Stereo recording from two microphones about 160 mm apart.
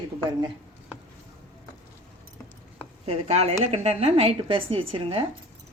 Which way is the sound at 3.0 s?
40° right (ahead or behind).